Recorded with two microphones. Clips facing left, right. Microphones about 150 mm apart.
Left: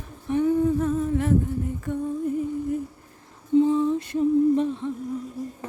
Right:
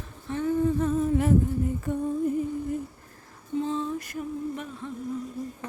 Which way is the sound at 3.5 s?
15° left (ahead or behind).